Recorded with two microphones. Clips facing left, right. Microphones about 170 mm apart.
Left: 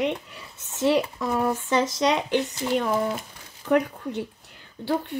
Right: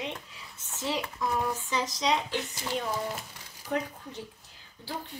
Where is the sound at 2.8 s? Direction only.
75° left (ahead or behind).